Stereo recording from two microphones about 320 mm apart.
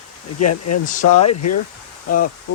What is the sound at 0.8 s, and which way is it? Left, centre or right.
Speech, left.